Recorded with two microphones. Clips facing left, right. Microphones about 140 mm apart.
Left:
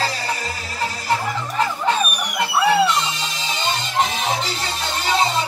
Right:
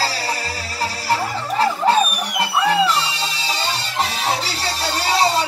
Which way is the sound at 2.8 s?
35° right (ahead or behind).